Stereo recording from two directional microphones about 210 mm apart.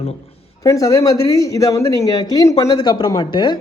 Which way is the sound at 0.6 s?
15° left (ahead or behind).